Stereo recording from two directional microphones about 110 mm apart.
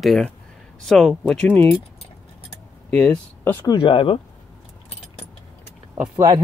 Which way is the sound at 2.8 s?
10° left (ahead or behind).